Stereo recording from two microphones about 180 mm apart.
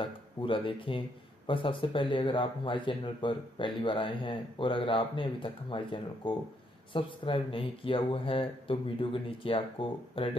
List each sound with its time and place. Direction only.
0.0 s speech: 30° left (ahead or behind)